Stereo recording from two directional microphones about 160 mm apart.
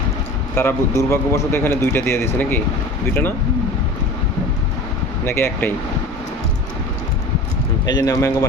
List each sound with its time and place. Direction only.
0.5 s a man's voice: 15° left (ahead or behind)
5.2 s a man's voice: 15° left (ahead or behind)
7.9 s speech: 25° left (ahead or behind)